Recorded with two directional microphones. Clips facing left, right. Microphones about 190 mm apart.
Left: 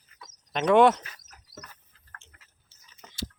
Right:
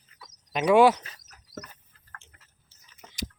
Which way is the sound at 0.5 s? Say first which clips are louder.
Right 1 dB; 5° right (ahead or behind).